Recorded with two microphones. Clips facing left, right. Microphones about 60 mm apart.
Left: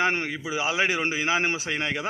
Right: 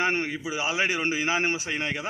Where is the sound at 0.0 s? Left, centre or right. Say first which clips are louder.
Left 1 dB; left.